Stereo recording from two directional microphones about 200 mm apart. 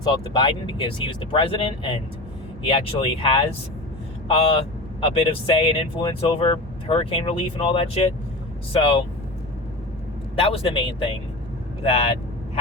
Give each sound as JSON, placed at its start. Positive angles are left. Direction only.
{"t": 0.0, "sound": "speech", "side_deg": 25}
{"t": 10.3, "sound": "speech", "side_deg": 30}